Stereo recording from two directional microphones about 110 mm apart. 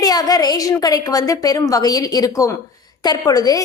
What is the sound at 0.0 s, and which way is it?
A woman's voice, 35° left (ahead or behind).